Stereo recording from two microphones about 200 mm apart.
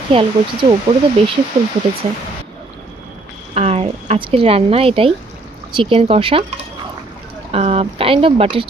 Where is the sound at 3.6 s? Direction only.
30° right (ahead or behind).